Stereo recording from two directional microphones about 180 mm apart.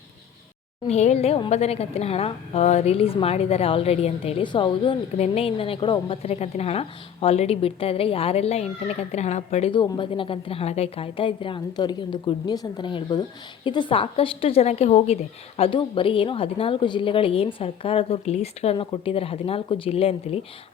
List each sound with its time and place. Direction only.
0.9 s a woman's voice: 35° left (ahead or behind)
9.8 s a woman's voice: 25° left (ahead or behind)